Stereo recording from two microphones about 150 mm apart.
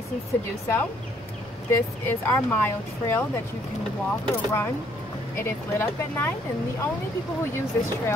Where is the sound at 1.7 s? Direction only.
15° left (ahead or behind).